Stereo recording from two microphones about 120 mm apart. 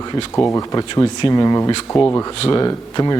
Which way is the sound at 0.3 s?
25° left (ahead or behind).